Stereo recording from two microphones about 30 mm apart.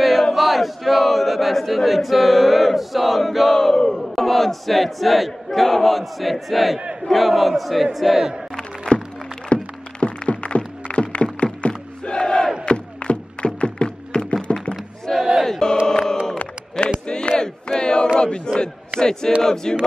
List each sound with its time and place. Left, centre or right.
0.3 s speech: centre
3.5 s battle cry: centre
4.0 s speech: centre
8.9 s a sound: left
9.5 s music: left
11.3 s battle cry: left
12.6 s music: left
15.1 s battle cry: centre
15.6 s chant: left
16.8 s battle cry: left